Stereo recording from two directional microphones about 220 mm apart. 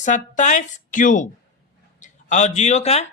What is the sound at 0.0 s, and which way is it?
A man's voice, 35° left (ahead or behind).